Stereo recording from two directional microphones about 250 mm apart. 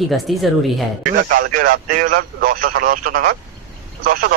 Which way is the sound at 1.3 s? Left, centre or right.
Right.